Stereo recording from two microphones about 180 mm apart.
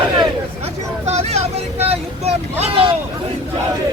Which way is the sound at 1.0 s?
35° right (ahead or behind).